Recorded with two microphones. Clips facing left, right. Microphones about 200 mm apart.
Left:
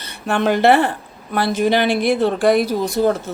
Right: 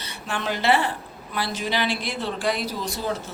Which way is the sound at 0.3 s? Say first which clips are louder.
Left 9 dB; 55° left (ahead or behind).